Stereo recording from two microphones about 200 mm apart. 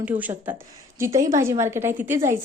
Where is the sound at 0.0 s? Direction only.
10° right (ahead or behind).